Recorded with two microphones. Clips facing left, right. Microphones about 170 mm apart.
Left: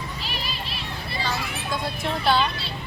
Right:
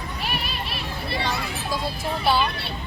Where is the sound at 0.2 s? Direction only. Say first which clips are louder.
Right 3 dB; 60° right (ahead or behind).